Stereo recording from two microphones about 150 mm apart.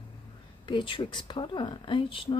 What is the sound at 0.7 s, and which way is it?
Speech, 30° left (ahead or behind).